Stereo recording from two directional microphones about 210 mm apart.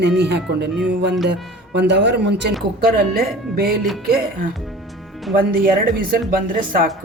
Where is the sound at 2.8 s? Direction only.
45° right (ahead or behind).